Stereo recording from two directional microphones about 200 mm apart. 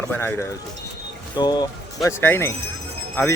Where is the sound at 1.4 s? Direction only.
20° left (ahead or behind).